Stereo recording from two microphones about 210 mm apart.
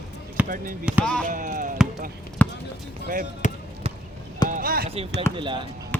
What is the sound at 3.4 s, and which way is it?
Basketball bounce, 35° left (ahead or behind).